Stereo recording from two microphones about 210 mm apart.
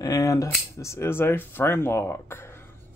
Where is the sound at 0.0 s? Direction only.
15° left (ahead or behind).